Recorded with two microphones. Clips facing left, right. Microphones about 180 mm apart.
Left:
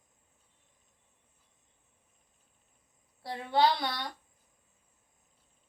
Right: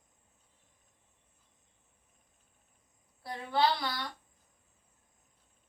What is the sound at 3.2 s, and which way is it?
Speech, 25° left (ahead or behind).